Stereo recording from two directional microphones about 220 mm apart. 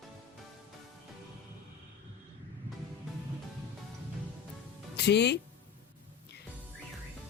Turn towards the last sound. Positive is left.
turn(degrees=50)  # may be behind; listen again after turning